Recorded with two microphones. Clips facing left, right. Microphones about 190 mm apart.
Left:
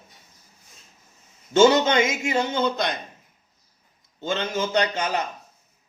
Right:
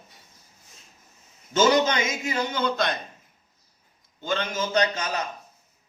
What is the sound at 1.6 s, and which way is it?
Speech, 25° left (ahead or behind).